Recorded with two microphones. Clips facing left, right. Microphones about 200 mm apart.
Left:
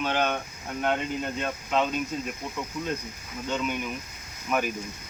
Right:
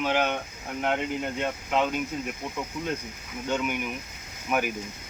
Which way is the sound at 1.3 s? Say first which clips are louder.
Even; 10° right (ahead or behind).